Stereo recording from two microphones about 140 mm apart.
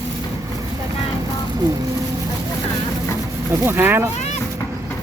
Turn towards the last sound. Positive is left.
turn(degrees=-15)  # may be behind; listen again after turning